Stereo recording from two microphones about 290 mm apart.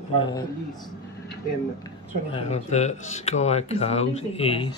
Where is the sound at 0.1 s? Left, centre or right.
Centre.